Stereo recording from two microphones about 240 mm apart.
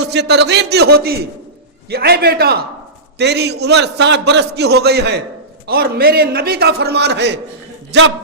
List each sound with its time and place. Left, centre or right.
0.0 s a man's voice: right